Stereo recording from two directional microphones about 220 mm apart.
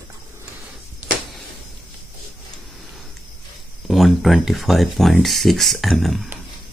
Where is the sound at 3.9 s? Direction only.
Centre (ahead or behind).